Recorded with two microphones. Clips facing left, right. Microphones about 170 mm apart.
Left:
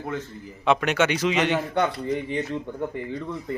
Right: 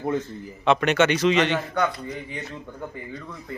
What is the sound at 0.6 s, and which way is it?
Speech, 5° left (ahead or behind).